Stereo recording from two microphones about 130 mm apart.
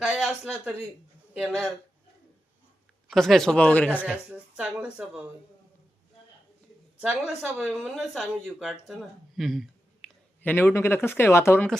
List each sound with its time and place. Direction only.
0.0 s a sound: centre (ahead or behind)
0.4 s speech: 10° right (ahead or behind)
1.4 s speech: 5° left (ahead or behind)
3.1 s speech: centre (ahead or behind)
4.3 s speech: 10° right (ahead or behind)
7.0 s speech: 10° right (ahead or behind)
7.6 s speech: centre (ahead or behind)
10.4 s speech: 15° left (ahead or behind)